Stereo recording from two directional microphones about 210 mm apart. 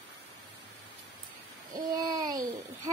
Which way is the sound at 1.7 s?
20° right (ahead or behind).